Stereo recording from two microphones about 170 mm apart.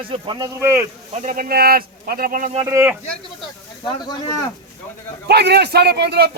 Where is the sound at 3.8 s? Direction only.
25° left (ahead or behind).